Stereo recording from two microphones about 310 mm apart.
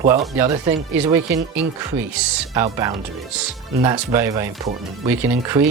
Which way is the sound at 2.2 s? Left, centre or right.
Centre.